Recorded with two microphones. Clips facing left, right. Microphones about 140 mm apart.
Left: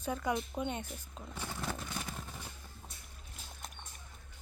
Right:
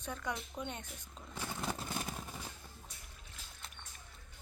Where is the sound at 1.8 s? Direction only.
30° right (ahead or behind).